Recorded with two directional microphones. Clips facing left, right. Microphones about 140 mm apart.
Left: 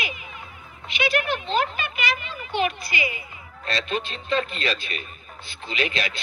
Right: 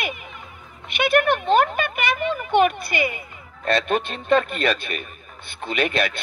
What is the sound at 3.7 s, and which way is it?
A man's voice, 55° right (ahead or behind).